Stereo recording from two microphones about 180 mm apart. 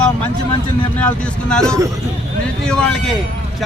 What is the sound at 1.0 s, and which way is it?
Speech, 5° left (ahead or behind).